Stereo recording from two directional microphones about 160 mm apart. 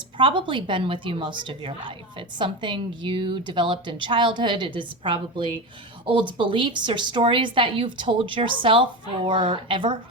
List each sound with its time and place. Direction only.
0.2 s a woman's voice: 30° right (ahead or behind)